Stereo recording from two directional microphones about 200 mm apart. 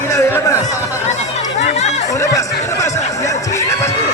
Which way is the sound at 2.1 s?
15° left (ahead or behind).